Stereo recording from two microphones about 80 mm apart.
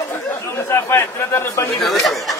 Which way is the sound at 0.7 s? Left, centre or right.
Left.